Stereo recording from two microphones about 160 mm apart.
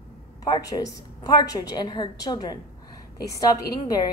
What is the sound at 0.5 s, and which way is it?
A woman's voice, 25° left (ahead or behind).